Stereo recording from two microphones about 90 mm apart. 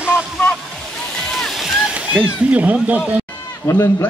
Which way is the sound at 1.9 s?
15° right (ahead or behind).